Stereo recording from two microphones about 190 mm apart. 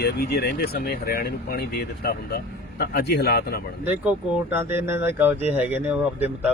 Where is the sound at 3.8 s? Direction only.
10° right (ahead or behind).